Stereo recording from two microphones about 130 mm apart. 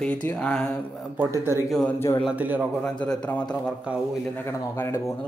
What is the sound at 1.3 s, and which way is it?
Speech, 20° right (ahead or behind).